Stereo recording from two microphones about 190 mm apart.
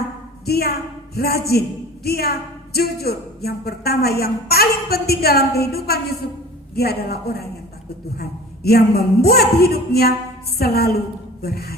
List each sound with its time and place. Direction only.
0.4 s speech: 55° left (ahead or behind)